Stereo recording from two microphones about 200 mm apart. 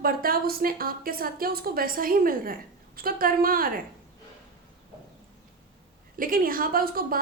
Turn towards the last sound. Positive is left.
turn(degrees=-45)  # may be behind; listen again after turning